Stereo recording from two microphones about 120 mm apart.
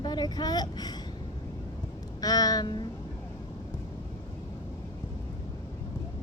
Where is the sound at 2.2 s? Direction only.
30° left (ahead or behind).